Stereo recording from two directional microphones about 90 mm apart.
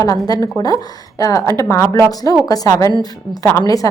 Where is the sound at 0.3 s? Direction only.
45° left (ahead or behind).